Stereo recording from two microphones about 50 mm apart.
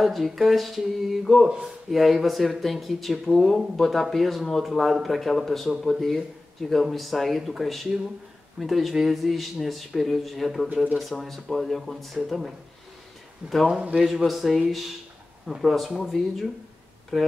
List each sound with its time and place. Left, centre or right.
0.0 s speech: centre
13.4 s speech: right
13.9 s speech: centre